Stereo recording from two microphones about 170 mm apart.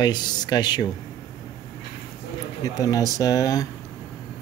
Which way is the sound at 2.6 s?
20° left (ahead or behind).